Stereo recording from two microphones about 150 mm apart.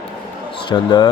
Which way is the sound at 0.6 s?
30° left (ahead or behind).